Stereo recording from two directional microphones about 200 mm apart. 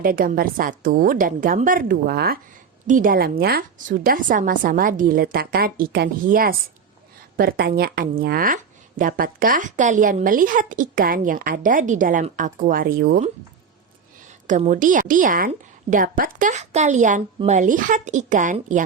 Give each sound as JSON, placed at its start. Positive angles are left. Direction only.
{"t": 0.0, "sound": "speech", "side_deg": -45}
{"t": 14.4, "sound": "a woman's voice", "side_deg": -40}